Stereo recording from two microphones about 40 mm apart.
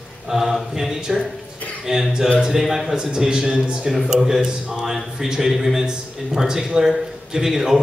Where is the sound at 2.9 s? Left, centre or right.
Centre.